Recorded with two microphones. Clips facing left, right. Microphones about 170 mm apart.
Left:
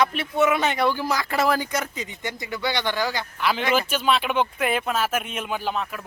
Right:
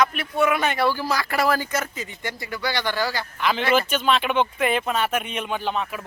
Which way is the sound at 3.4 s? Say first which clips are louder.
Right 2 dB; 5° left (ahead or behind).